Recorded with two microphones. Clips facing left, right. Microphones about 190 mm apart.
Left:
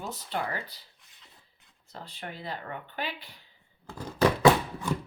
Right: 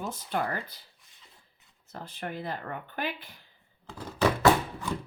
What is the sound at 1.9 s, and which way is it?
Speech, 50° right (ahead or behind).